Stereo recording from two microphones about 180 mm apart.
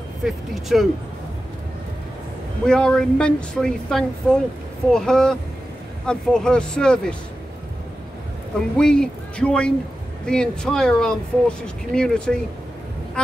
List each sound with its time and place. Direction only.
0.2 s speech: centre (ahead or behind)
2.6 s speech: 5° left (ahead or behind)
8.7 s speech: 5° left (ahead or behind)